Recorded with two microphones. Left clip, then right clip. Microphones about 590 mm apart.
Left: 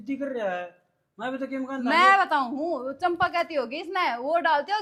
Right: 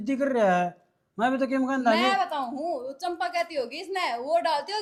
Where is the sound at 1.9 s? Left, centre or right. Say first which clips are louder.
Left 5 dB; left.